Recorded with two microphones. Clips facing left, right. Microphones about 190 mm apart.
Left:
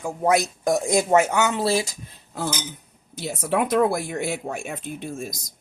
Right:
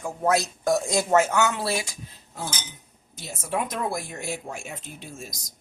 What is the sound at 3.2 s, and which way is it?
Speech, 70° left (ahead or behind).